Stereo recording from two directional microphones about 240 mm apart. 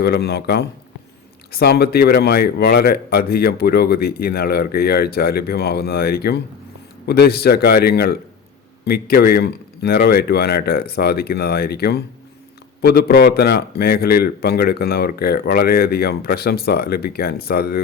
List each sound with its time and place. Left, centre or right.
0.0 s a man's voice: left